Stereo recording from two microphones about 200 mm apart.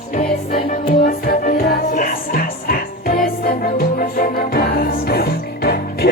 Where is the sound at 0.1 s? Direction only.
40° left (ahead or behind).